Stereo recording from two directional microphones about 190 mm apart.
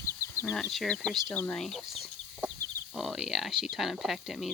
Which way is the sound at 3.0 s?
Centre (ahead or behind).